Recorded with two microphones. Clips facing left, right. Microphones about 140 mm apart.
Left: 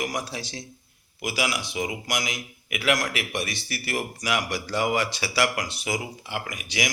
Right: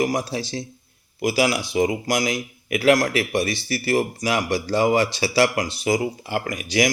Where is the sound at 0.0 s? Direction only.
30° right (ahead or behind).